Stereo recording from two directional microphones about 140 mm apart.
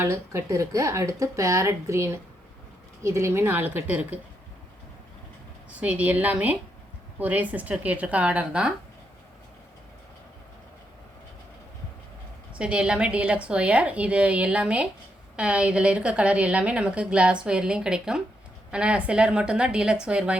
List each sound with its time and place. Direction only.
0.0 s a woman's voice: 20° right (ahead or behind)
5.8 s a woman's voice: 10° right (ahead or behind)
12.5 s a woman's voice: 5° right (ahead or behind)